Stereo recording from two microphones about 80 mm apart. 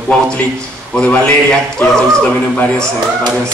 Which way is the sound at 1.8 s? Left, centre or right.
Left.